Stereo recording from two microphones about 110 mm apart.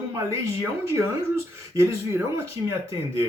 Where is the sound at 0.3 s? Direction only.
20° right (ahead or behind).